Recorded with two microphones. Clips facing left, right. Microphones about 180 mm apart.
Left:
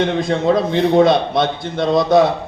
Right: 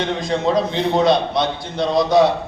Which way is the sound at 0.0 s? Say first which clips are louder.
Left 3 dB; 55° left (ahead or behind).